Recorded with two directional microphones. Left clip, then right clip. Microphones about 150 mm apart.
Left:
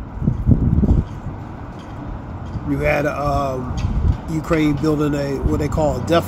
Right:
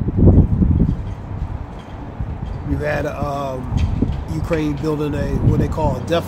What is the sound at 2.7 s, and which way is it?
Speech, 20° left (ahead or behind).